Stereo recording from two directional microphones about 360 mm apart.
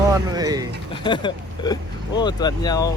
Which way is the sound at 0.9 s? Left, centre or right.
Centre.